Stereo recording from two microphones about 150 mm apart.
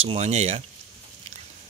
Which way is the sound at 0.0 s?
45° right (ahead or behind).